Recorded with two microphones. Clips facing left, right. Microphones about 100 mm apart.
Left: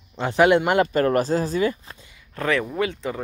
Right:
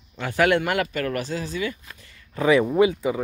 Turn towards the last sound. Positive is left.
turn(degrees=-10)  # may be behind; listen again after turning